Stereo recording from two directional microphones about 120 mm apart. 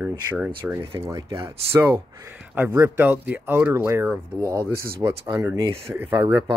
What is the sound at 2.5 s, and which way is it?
Speech, 20° right (ahead or behind).